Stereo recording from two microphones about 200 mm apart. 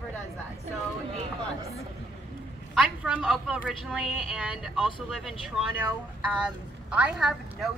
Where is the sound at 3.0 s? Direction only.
5° right (ahead or behind).